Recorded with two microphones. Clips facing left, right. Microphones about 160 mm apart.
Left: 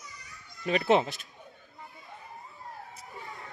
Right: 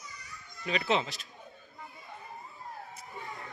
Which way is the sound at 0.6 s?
45° left (ahead or behind).